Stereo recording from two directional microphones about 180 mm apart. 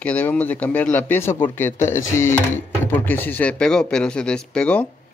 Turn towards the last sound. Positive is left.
turn(degrees=5)  # may be behind; listen again after turning